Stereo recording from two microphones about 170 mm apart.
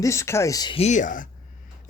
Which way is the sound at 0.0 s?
15° left (ahead or behind).